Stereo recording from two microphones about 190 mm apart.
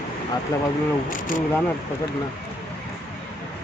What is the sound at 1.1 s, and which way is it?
Speech, 45° left (ahead or behind).